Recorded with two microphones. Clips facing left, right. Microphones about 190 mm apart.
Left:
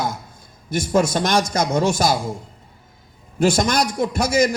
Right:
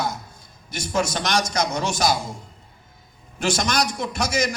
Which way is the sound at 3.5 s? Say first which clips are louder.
Left 4 dB; 55° left (ahead or behind).